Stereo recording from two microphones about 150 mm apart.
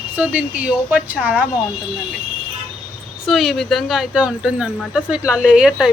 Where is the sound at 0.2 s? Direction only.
10° right (ahead or behind).